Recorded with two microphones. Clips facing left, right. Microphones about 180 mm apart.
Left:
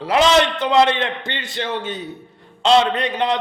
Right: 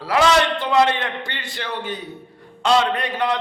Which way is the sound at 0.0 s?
20° left (ahead or behind).